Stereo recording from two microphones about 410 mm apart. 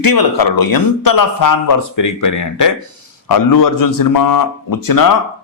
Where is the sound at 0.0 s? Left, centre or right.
Left.